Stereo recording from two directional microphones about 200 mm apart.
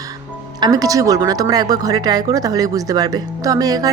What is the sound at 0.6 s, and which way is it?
Speech, 20° right (ahead or behind).